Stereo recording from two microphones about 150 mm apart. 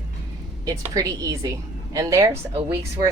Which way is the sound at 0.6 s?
20° right (ahead or behind).